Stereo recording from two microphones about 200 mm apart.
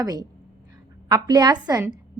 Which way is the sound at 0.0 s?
20° right (ahead or behind).